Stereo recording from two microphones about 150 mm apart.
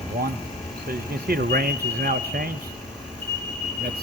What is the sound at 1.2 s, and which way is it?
Speech, 85° right.